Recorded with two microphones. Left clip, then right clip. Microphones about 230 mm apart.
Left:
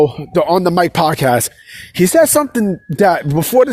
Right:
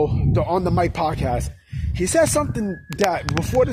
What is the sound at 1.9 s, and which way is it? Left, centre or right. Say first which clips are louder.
Speech: left 8 dB; left.